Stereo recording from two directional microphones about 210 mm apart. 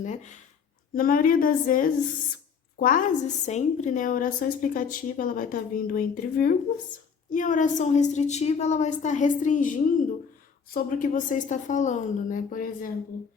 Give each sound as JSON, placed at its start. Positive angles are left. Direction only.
{"t": 0.0, "sound": "a woman's voice", "side_deg": 35}